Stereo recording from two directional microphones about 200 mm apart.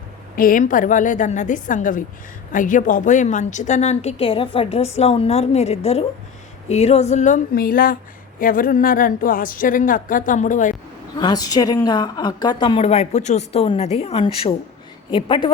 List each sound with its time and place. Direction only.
0.3 s a woman's voice: 45° left (ahead or behind)
11.2 s a woman's voice: 20° left (ahead or behind)